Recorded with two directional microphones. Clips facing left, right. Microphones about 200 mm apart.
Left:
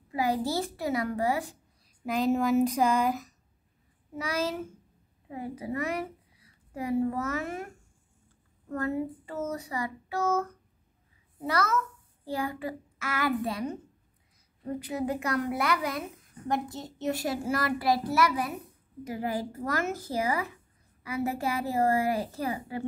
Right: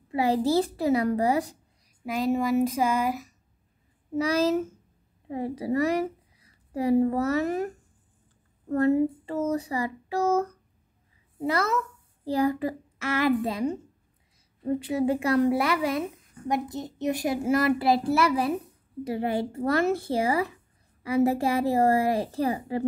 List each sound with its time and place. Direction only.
0.1 s child singing: 30° right (ahead or behind)
2.0 s speech: 5° right (ahead or behind)
4.1 s child singing: 35° right (ahead or behind)
5.3 s a woman's voice: 35° right (ahead or behind)
8.6 s child singing: 35° right (ahead or behind)
11.3 s a child's voice: 25° right (ahead or behind)
12.3 s child singing: 40° right (ahead or behind)
14.6 s speech: 25° right (ahead or behind)
21.0 s child singing: 35° right (ahead or behind)